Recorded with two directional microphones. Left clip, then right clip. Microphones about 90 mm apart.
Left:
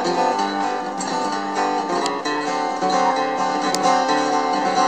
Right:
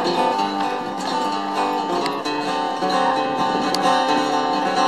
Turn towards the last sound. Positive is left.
turn(degrees=50)  # may be behind; listen again after turning